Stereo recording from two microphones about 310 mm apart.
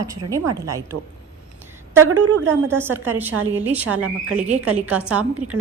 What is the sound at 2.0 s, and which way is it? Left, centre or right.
Speech, right.